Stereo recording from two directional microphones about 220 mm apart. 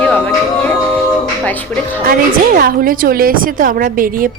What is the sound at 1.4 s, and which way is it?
Music, 5° left (ahead or behind).